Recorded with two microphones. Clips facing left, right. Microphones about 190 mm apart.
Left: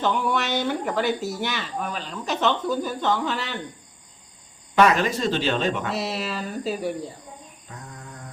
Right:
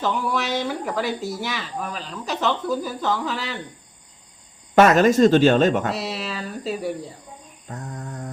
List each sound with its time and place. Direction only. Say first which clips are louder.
0.0 s speech: even; centre (ahead or behind)
4.7 s speech: right 5 dB; 45° right (ahead or behind)
5.9 s speech: even; centre (ahead or behind)
7.7 s mantra: right 8 dB; 40° right (ahead or behind)